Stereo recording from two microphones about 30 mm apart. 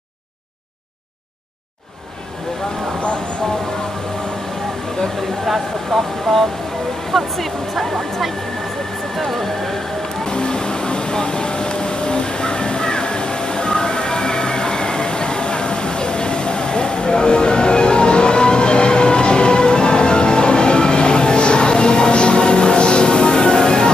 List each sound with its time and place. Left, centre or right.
5.4 s speech: centre
10.2 s vehicle: left